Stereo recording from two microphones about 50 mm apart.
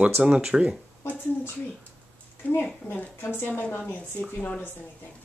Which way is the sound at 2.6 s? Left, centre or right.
Left.